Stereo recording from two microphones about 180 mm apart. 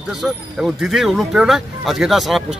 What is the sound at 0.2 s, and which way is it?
Speech, centre (ahead or behind).